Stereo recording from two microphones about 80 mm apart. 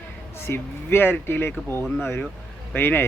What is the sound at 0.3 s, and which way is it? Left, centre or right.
Speech, left.